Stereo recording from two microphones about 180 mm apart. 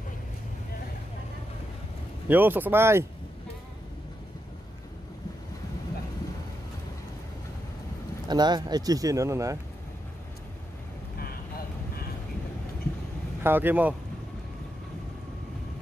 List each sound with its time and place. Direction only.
2.2 s speech: 10° right (ahead or behind)
8.3 s speech: 25° right (ahead or behind)
13.4 s speech: 10° right (ahead or behind)